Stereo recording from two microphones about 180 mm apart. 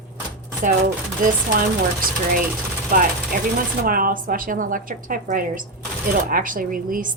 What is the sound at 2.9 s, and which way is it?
A woman's voice, 55° right (ahead or behind).